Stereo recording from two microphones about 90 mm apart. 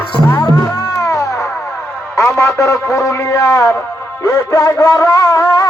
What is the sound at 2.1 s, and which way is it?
A man's voice, 35° left (ahead or behind).